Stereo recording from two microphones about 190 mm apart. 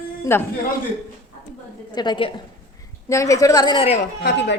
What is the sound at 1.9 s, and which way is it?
A woman's voice, 25° left (ahead or behind).